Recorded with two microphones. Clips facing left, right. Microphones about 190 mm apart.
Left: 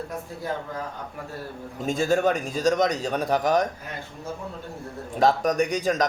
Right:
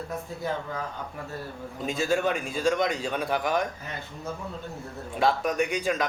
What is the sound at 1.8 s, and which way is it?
A man's voice, 45° left (ahead or behind).